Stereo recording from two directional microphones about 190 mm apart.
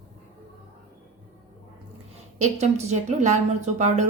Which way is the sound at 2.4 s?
35° right (ahead or behind).